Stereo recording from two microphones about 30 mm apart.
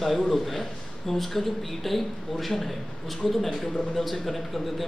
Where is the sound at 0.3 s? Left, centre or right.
Centre.